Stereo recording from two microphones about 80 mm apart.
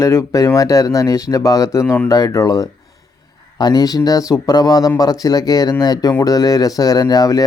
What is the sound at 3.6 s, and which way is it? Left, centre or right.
Speech, left.